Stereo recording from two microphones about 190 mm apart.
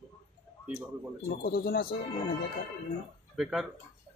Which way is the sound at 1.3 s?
55° left (ahead or behind).